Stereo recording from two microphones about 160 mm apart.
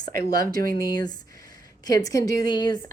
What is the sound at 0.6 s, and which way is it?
Speech, 65° right (ahead or behind).